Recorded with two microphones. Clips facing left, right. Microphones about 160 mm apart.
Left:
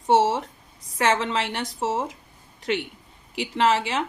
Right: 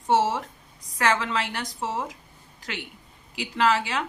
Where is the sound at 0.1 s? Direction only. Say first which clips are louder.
Left 3 dB; 25° left (ahead or behind).